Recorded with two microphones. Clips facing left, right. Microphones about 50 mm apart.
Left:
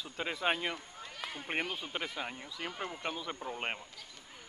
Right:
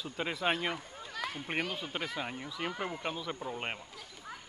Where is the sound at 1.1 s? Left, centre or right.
Right.